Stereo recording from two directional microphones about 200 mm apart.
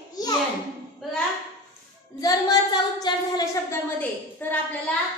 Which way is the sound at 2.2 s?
20° left (ahead or behind).